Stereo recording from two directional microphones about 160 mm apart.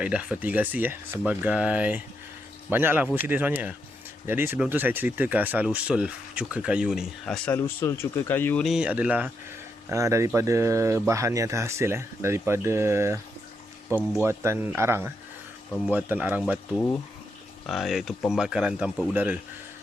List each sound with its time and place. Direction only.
0.0 s speech: 10° right (ahead or behind)
7.5 s speech: 15° left (ahead or behind)
8.6 s speech: 5° right (ahead or behind)
9.9 s speech: 20° right (ahead or behind)
14.2 s speech: 15° right (ahead or behind)
16.7 s speech: 15° left (ahead or behind)
17.7 s speech: centre (ahead or behind)